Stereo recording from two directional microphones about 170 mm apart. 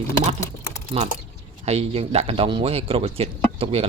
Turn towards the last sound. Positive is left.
turn(degrees=-35)  # may be behind; listen again after turning